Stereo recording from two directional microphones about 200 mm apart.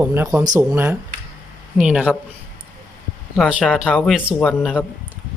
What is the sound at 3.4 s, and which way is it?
Speech, 5° right (ahead or behind).